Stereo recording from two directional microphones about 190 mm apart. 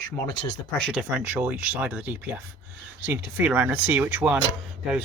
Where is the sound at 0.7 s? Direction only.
Centre (ahead or behind).